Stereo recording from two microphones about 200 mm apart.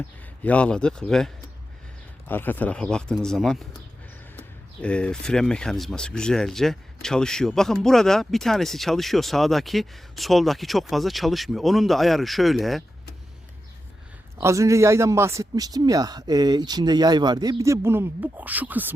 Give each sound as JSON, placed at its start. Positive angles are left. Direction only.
{"t": 0.4, "sound": "speech", "side_deg": 5}
{"t": 14.4, "sound": "speech", "side_deg": -15}